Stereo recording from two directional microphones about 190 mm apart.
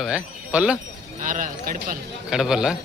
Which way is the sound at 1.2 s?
45° right (ahead or behind).